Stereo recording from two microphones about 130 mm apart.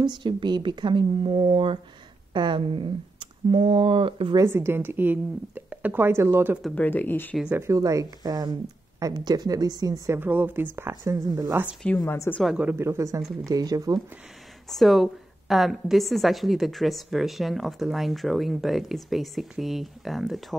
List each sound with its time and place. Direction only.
0.0 s speech: 35° right (ahead or behind)
4.4 s a woman's voice: 20° right (ahead or behind)
6.7 s speech: 15° left (ahead or behind)
7.5 s a woman's voice: 25° right (ahead or behind)
12.0 s speech: 20° left (ahead or behind)
12.5 s a woman's voice: 15° right (ahead or behind)
14.7 s a woman's voice: centre (ahead or behind)